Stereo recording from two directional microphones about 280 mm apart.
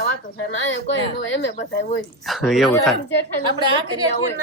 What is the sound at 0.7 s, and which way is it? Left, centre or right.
Speech, left.